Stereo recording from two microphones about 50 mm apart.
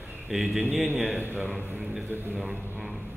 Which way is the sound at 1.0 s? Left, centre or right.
Right.